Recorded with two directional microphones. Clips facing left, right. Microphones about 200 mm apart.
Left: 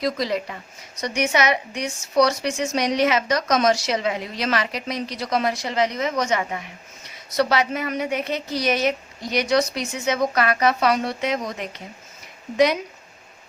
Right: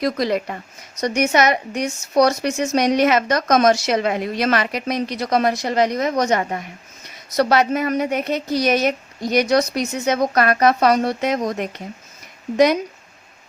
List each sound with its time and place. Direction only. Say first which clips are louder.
0.0 s a woman's voice: right 4 dB; 55° right (ahead or behind)